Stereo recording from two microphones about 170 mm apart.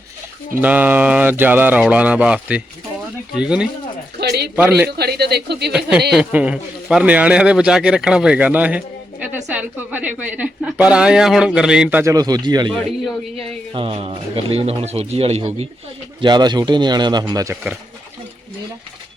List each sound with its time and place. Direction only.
0.5 s a woman's voice: 10° right (ahead or behind)
4.2 s speech: 70° right (ahead or behind)
6.1 s a woman's voice: 5° right (ahead or behind)
12.1 s speech: 25° right (ahead or behind)
13.7 s a man's voice: 35° right (ahead or behind)
16.2 s speech: 25° right (ahead or behind)